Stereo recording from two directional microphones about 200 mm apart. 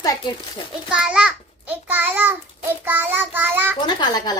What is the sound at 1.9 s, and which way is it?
Child singing, 10° right (ahead or behind).